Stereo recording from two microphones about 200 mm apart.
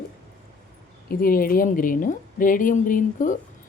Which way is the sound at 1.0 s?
45° left (ahead or behind).